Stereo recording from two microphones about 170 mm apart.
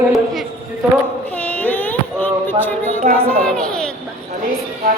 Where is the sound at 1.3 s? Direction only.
10° left (ahead or behind).